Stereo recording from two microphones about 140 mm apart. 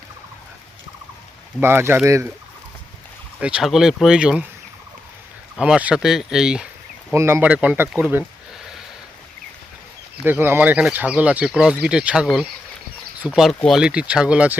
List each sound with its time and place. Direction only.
1.6 s speech: 15° right (ahead or behind)
3.4 s speech: 5° right (ahead or behind)
5.5 s speech: 5° right (ahead or behind)
7.1 s speech: 20° right (ahead or behind)
10.2 s speech: 15° right (ahead or behind)